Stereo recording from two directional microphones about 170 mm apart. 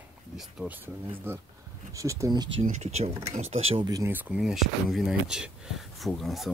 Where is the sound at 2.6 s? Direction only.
40° right (ahead or behind).